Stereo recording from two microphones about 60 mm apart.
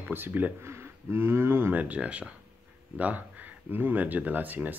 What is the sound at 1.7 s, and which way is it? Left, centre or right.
Speech, right.